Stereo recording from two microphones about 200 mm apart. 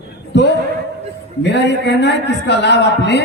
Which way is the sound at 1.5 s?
60° left (ahead or behind).